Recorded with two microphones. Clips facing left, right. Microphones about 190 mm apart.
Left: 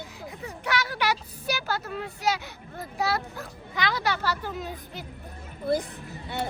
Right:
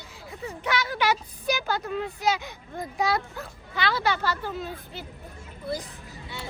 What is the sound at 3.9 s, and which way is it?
Speech, 15° left (ahead or behind).